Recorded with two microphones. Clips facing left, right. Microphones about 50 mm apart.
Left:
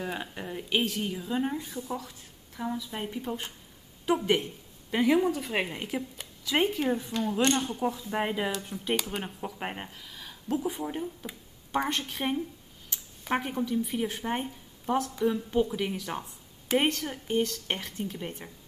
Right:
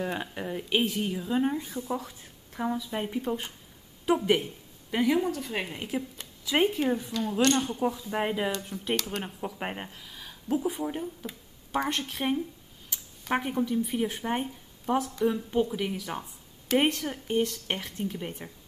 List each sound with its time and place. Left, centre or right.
0.0 s speech: centre
1.6 s speech: right
1.9 s a woman's voice: centre